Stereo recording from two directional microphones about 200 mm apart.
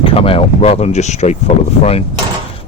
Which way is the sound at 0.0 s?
30° left (ahead or behind).